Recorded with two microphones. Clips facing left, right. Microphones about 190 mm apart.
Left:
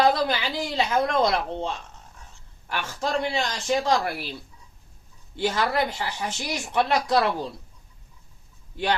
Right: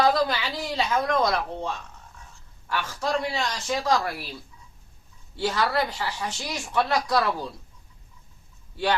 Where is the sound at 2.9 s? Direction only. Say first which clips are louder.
Left 2 dB; 25° left (ahead or behind).